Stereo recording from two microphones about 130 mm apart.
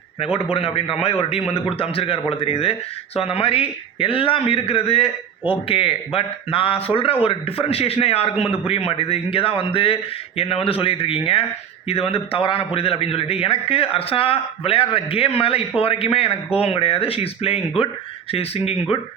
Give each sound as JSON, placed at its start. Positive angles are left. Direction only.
{"t": 0.5, "sound": "a man's voice", "side_deg": 50}